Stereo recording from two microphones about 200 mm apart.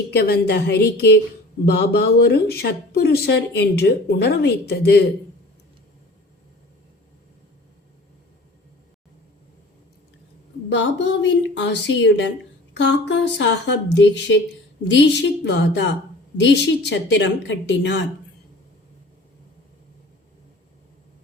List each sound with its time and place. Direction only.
0.1 s speech: 55° left (ahead or behind)
10.7 s speech: 60° left (ahead or behind)